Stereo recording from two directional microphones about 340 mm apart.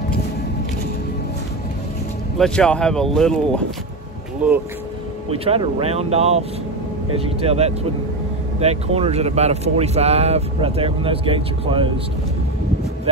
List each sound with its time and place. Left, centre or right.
2.3 s speech: centre
5.4 s speech: centre